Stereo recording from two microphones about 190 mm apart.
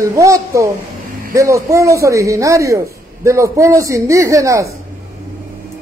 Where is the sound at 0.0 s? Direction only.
15° right (ahead or behind).